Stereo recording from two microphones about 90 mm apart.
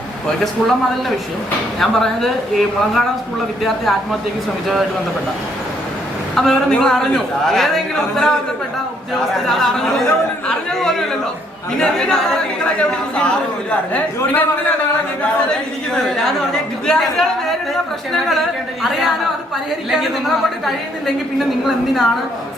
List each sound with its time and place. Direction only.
1.8 s a woman's voice: 5° left (ahead or behind)
6.3 s a woman's voice: 5° left (ahead or behind)
9.3 s a woman's voice: 5° left (ahead or behind)
16.0 s a woman's voice: 5° left (ahead or behind)
18.8 s a woman's voice: centre (ahead or behind)
21.9 s a woman's voice: centre (ahead or behind)